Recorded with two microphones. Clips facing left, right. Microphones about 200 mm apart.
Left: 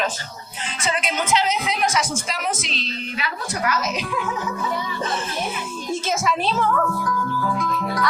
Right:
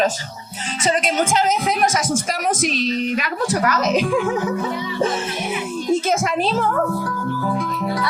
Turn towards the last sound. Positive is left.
turn(degrees=-30)  # may be behind; listen again after turning